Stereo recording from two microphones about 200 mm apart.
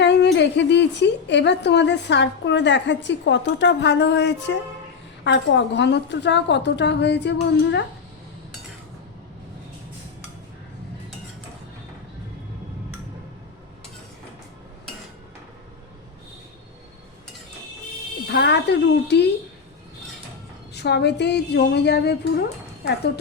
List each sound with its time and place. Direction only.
0.0 s a woman's voice: 60° left (ahead or behind)
18.3 s a woman's voice: 55° left (ahead or behind)
20.7 s a woman's voice: 55° left (ahead or behind)